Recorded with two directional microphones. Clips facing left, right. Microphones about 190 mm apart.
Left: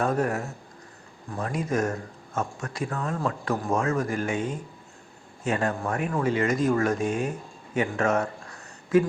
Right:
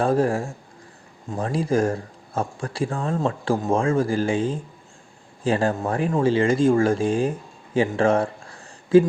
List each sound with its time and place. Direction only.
0.0 s speech: 30° right (ahead or behind)